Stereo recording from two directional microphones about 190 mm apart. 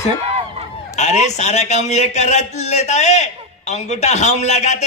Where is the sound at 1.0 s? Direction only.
35° left (ahead or behind).